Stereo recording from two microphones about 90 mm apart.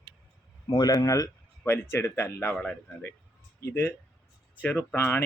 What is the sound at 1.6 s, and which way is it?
Speech, 25° left (ahead or behind).